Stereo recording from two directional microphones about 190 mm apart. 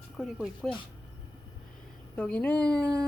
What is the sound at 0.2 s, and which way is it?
Speech, centre (ahead or behind).